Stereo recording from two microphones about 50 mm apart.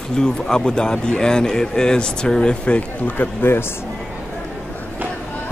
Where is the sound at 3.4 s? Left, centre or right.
Left.